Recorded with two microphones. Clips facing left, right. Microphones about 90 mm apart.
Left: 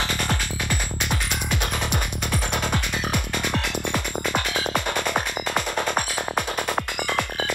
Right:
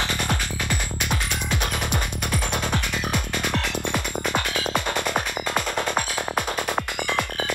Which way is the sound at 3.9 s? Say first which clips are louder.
Even; 20° right (ahead or behind).